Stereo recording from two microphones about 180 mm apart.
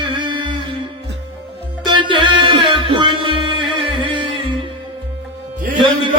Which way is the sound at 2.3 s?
25° right (ahead or behind).